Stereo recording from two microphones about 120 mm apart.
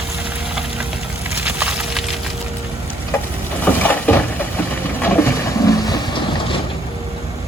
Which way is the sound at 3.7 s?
15° left (ahead or behind).